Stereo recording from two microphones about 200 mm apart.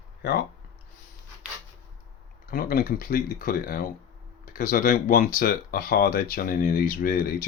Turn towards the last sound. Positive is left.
turn(degrees=45)  # may be behind; listen again after turning